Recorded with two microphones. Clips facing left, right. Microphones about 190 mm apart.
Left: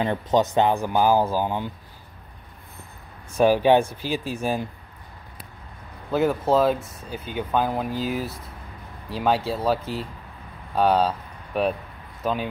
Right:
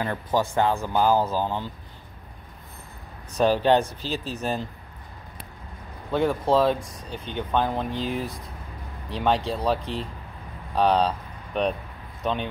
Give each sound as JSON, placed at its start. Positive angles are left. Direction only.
{"t": 0.0, "sound": "speech", "side_deg": 20}
{"t": 3.3, "sound": "speech", "side_deg": 10}
{"t": 6.1, "sound": "speech", "side_deg": 5}